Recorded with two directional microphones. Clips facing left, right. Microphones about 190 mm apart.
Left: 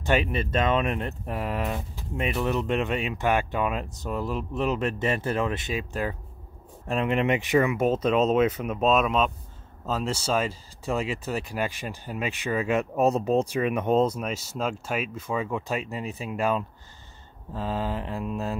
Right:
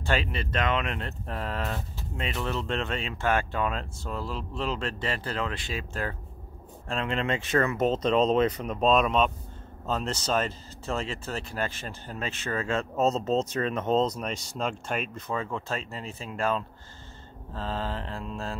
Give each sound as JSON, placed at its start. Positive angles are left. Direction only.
{"t": 0.0, "sound": "speech", "side_deg": 20}